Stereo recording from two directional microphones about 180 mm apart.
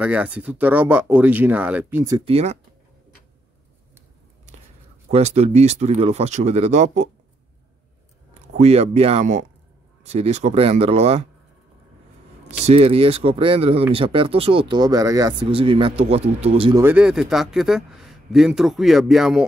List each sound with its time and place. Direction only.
0.0 s speech: 5° right (ahead or behind)
2.2 s speech: 35° right (ahead or behind)
5.1 s speech: 35° right (ahead or behind)
8.5 s speech: 35° right (ahead or behind)
12.4 s speech: 35° right (ahead or behind)
16.7 s a man's voice: 10° right (ahead or behind)